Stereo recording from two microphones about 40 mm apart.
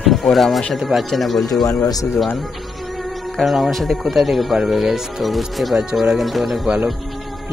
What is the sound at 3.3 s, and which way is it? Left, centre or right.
Speech, centre.